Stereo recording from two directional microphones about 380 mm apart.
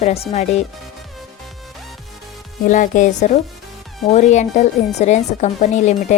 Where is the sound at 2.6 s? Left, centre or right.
Centre.